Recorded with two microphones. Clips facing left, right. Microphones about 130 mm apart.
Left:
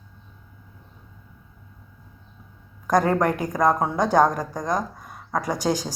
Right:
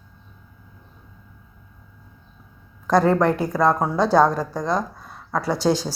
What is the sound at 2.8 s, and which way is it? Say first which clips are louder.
A woman's voice: right 3 dB; 15° left (ahead or behind).